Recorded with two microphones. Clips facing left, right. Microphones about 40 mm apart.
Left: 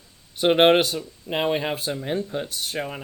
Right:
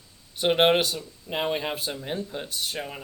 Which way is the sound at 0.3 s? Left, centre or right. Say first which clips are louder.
Left 4 dB; left.